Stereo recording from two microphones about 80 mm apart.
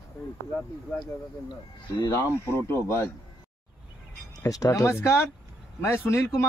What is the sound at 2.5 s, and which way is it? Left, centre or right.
Speech, left.